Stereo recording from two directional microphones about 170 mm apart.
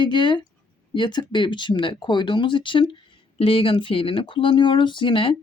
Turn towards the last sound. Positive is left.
turn(degrees=30)  # may be behind; listen again after turning